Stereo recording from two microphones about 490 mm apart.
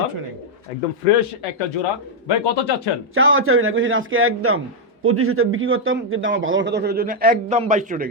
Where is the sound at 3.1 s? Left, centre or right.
Right.